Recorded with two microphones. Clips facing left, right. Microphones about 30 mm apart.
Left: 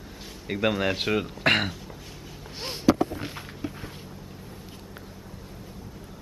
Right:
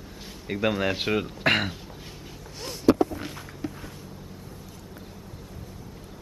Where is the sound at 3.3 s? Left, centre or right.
Left.